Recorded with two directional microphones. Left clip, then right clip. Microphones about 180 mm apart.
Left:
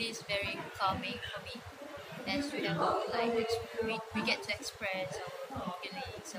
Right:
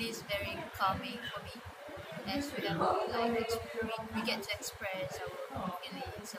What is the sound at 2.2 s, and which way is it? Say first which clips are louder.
Speech: left 2 dB; 5° left (ahead or behind).